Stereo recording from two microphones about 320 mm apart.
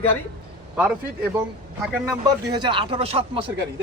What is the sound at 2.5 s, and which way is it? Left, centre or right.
Speech, centre.